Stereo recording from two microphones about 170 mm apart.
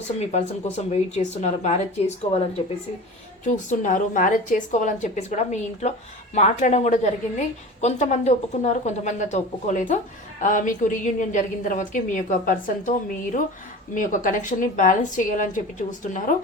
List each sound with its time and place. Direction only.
0.2 s speech: 40° left (ahead or behind)
3.4 s a woman's voice: 45° left (ahead or behind)
13.9 s a woman's voice: 50° left (ahead or behind)